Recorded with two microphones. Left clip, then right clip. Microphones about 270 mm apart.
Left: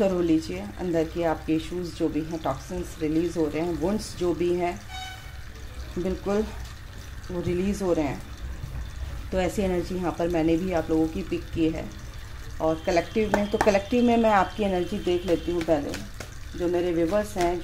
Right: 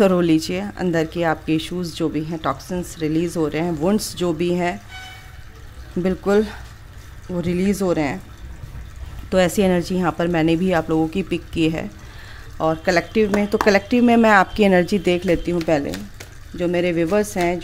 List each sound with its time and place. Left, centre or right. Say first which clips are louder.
0.0 s speech: right 7 dB; right
6.0 s speech: right 9 dB; right
7.4 s speech: right 5 dB; right
9.3 s speech: right 9 dB; right